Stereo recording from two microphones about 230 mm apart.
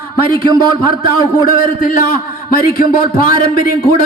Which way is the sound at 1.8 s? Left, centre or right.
Left.